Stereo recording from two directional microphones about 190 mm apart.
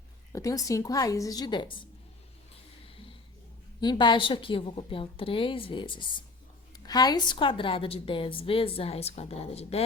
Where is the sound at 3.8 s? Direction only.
25° left (ahead or behind).